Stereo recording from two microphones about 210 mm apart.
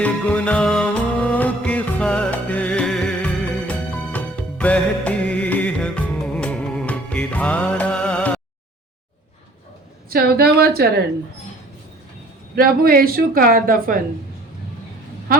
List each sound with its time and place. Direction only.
0.0 s music: 5° left (ahead or behind)
10.1 s speech: 45° right (ahead or behind)
12.5 s speech: 45° right (ahead or behind)